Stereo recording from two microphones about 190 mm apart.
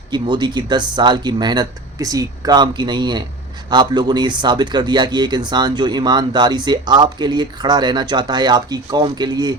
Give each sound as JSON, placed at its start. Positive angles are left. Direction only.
{"t": 0.1, "sound": "speech", "side_deg": -25}